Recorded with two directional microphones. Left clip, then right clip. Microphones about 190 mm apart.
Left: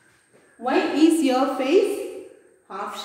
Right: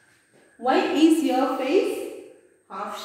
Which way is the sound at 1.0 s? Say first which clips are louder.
Left 1 dB; 10° left (ahead or behind).